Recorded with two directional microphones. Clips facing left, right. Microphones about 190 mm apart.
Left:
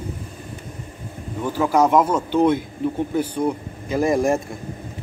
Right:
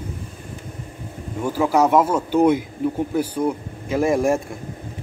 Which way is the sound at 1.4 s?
10° right (ahead or behind).